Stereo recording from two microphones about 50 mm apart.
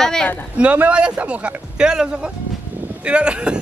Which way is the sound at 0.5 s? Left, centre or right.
Right.